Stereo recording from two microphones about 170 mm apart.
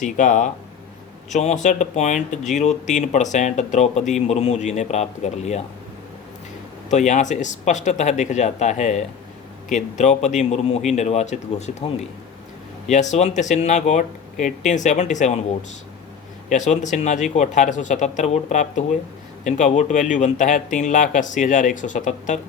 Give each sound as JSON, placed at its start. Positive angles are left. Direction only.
{"t": 0.0, "sound": "speech", "side_deg": 50}
{"t": 6.9, "sound": "a man's voice", "side_deg": 45}
{"t": 12.9, "sound": "speech", "side_deg": 45}
{"t": 16.5, "sound": "speech", "side_deg": 45}